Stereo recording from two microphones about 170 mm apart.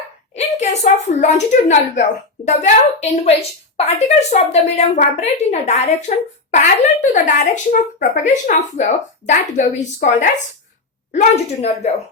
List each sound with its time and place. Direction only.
0.3 s a woman's voice: 40° left (ahead or behind)